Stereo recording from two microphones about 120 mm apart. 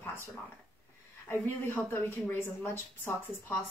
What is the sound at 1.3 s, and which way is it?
A woman's voice, 20° left (ahead or behind).